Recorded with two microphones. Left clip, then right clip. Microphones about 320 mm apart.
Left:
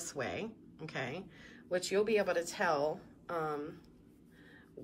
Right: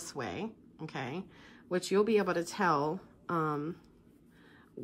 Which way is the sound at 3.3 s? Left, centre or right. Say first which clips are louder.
Right 4 dB; right.